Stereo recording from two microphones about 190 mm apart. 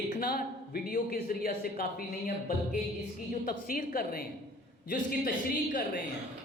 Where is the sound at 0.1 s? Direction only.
45° left (ahead or behind).